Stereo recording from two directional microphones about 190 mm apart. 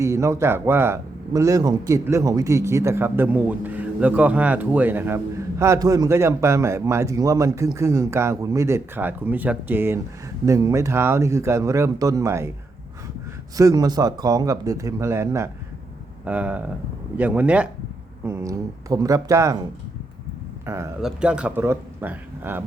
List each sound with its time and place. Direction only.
0.0 s speech: 15° right (ahead or behind)
13.6 s speech: 20° right (ahead or behind)
20.7 s speech: 15° right (ahead or behind)